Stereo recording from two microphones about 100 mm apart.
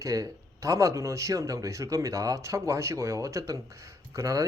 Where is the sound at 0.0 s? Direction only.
35° right (ahead or behind).